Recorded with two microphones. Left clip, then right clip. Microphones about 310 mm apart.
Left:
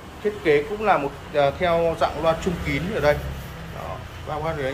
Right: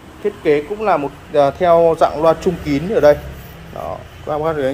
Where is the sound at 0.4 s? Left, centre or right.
Right.